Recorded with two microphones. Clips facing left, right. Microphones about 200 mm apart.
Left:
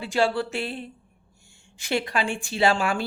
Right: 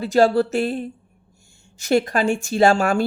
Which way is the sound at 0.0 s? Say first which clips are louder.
Right 8 dB; 40° right (ahead or behind).